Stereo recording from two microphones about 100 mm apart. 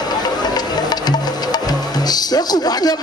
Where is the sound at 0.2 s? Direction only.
45° left (ahead or behind).